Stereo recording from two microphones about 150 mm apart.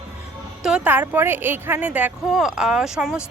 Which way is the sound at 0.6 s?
10° right (ahead or behind).